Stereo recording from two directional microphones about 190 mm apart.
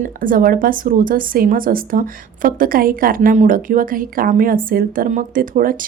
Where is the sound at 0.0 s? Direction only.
45° right (ahead or behind).